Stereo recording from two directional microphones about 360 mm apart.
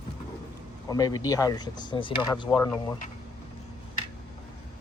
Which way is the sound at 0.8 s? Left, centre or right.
Centre.